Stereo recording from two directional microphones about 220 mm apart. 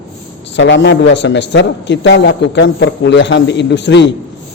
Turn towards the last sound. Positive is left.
turn(degrees=50)  # may be behind; listen again after turning